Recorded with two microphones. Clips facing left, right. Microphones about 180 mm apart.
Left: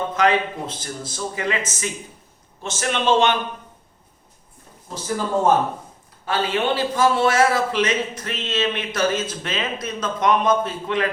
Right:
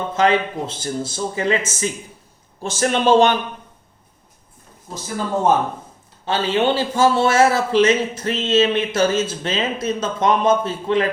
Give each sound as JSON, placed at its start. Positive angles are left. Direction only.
{"t": 0.1, "sound": "a man's voice", "side_deg": -25}
{"t": 6.2, "sound": "a man's voice", "side_deg": -30}